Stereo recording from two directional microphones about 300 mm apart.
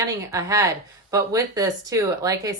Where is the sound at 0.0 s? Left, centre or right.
Centre.